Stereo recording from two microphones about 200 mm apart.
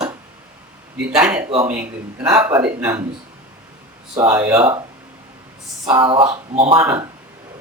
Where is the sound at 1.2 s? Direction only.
10° right (ahead or behind).